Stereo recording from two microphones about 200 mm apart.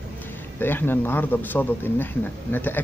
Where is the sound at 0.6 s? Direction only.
10° left (ahead or behind).